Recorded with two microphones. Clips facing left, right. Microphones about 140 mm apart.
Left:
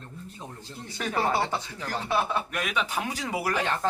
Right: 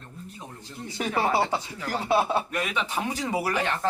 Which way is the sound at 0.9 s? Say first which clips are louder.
Right 2 dB; 15° right (ahead or behind).